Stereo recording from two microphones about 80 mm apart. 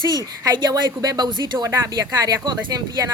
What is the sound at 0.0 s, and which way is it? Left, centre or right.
Speech, right.